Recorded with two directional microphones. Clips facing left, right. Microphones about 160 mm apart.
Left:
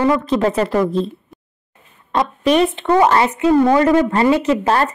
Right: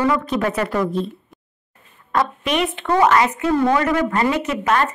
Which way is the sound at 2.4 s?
35° left (ahead or behind).